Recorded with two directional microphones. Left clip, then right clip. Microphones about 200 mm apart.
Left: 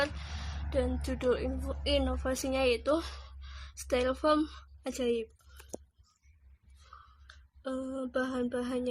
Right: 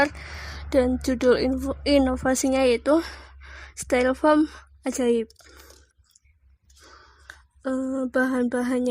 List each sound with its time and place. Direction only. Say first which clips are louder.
0.7 s a woman's voice: right 11 dB; 40° right (ahead or behind); by 4.9 s 25° right (ahead or behind)
4.9 s speech: right 9 dB; 35° right (ahead or behind)
7.3 s speech: right 9 dB; 35° right (ahead or behind)